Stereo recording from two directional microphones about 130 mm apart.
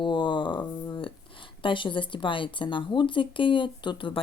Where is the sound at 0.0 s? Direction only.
40° left (ahead or behind).